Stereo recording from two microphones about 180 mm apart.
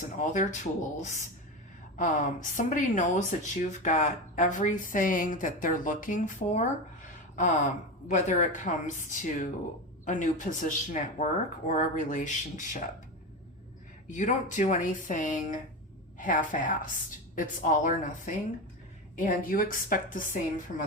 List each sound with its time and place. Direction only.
0.0 s speech: 45° left (ahead or behind)
14.1 s speech: 45° left (ahead or behind)
19.1 s speech: 50° left (ahead or behind)